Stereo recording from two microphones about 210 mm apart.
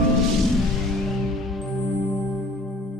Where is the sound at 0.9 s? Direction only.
Centre (ahead or behind).